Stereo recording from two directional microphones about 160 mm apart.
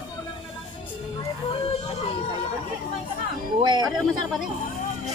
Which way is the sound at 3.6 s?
25° right (ahead or behind).